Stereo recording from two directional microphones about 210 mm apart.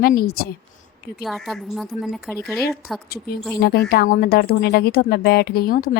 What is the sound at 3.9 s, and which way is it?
A woman's voice, 45° left (ahead or behind).